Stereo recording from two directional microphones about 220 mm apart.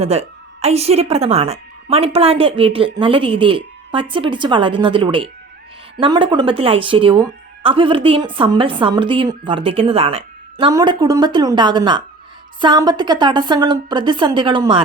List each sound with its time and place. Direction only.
0.0 s speech: 30° right (ahead or behind)